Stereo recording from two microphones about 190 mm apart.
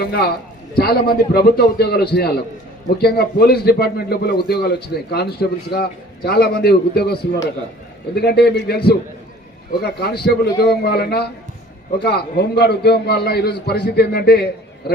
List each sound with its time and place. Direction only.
0.0 s a man's voice: 55° left (ahead or behind)